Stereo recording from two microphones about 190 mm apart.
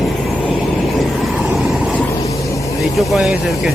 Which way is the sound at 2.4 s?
15° left (ahead or behind).